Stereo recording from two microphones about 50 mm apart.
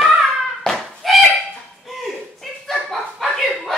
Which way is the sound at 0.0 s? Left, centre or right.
Centre.